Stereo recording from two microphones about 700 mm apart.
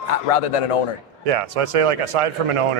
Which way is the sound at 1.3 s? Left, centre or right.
Right.